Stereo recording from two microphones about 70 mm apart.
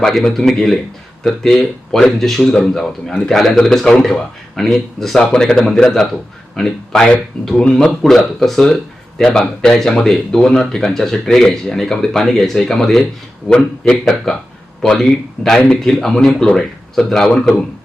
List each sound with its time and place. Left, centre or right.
0.0 s a man's voice: centre